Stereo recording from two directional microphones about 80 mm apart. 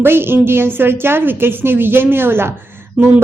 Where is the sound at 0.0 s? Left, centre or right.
Right.